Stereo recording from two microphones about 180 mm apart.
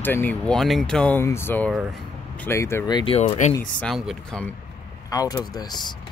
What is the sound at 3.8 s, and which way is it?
Speech, 5° left (ahead or behind).